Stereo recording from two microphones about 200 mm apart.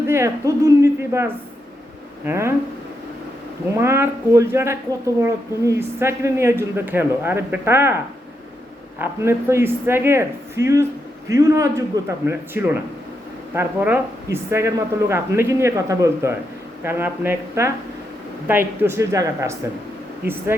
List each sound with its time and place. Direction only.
0.1 s a woman's voice: 15° right (ahead or behind)
3.8 s a woman's voice: 10° right (ahead or behind)
9.0 s a woman's voice: 10° right (ahead or behind)